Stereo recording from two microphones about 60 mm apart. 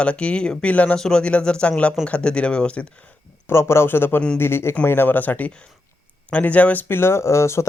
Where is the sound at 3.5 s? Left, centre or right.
Left.